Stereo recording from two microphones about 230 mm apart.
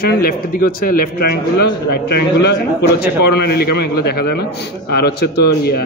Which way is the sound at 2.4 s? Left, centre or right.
Left.